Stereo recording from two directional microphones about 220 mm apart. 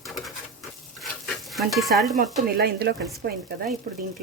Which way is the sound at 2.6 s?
45° right (ahead or behind).